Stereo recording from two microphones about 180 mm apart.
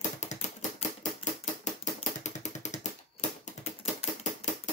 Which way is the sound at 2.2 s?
40° left (ahead or behind).